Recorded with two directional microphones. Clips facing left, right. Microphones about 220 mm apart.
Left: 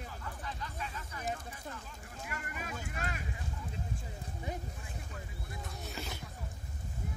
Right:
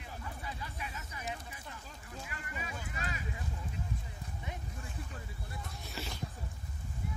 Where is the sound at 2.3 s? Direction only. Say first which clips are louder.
Left 4 dB; 55° left (ahead or behind).